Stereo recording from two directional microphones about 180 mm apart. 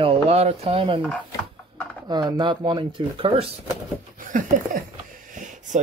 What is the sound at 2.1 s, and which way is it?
Speech, 25° right (ahead or behind).